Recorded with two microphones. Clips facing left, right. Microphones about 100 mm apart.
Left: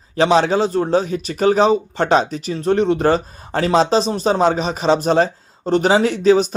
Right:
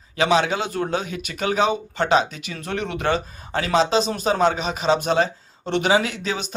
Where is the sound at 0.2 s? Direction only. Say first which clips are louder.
Left 5 dB; 35° left (ahead or behind).